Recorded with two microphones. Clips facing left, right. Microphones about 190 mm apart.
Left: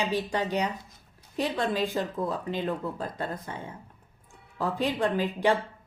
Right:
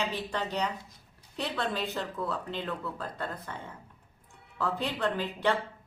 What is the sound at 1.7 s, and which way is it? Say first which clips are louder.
A woman's voice: left 5 dB; 15° left (ahead or behind).